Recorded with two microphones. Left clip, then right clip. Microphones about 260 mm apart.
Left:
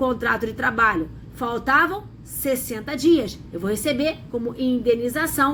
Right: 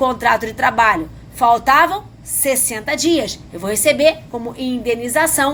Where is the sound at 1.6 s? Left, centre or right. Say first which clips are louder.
Right 6 dB; centre.